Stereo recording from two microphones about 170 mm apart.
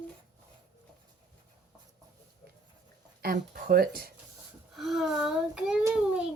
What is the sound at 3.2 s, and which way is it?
Speech, 65° right (ahead or behind).